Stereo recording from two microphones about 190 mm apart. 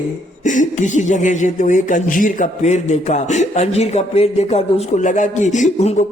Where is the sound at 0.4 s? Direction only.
40° left (ahead or behind).